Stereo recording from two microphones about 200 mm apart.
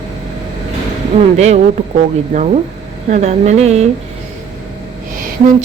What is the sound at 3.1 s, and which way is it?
Speech, 35° right (ahead or behind).